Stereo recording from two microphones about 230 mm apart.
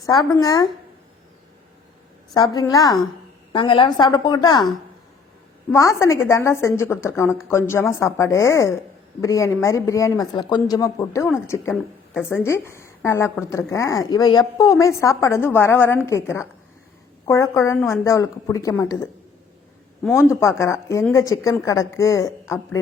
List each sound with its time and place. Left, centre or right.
0.3 s speech: centre
2.3 s speech: centre
5.7 s speech: centre
11.7 s speech: centre
12.5 s speech: centre